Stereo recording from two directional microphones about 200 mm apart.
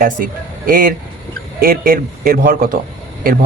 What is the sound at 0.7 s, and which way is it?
A man's voice, 45° right (ahead or behind).